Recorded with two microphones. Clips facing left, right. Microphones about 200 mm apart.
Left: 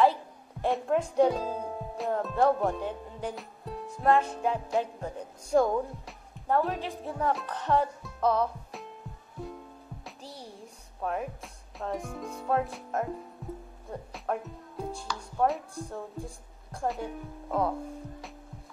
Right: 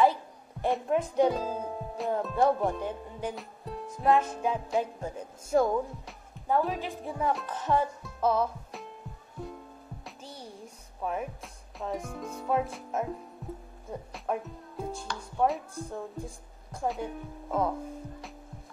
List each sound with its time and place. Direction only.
0.6 s speech: centre (ahead or behind)
2.6 s music: centre (ahead or behind)
5.0 s a woman's voice: centre (ahead or behind)
10.0 s music: centre (ahead or behind)
13.8 s speech: centre (ahead or behind)